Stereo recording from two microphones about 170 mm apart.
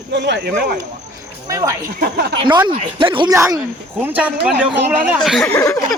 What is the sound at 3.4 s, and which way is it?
Speech, 15° right (ahead or behind).